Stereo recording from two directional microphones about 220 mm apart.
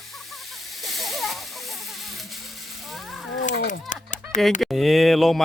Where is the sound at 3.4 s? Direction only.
40° left (ahead or behind).